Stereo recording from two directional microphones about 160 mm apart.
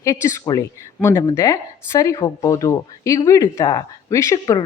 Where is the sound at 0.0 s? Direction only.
15° left (ahead or behind).